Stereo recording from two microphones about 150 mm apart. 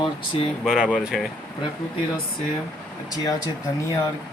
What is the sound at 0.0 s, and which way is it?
Speech, 40° left (ahead or behind).